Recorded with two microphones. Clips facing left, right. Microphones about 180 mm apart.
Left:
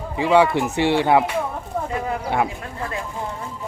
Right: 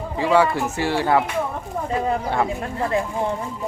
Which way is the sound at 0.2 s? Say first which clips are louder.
Left 2 dB; 20° left (ahead or behind).